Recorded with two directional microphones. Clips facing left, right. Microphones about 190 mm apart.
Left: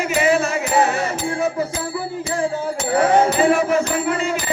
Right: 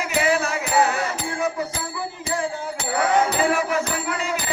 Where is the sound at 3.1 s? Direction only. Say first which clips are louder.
Left 4 dB; 30° left (ahead or behind).